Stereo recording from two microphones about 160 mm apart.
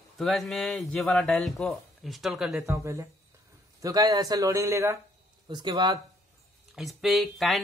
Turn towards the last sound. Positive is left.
turn(degrees=0)  # may be behind; listen again after turning